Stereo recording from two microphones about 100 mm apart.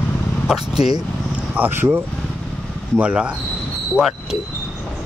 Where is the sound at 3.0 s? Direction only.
10° right (ahead or behind).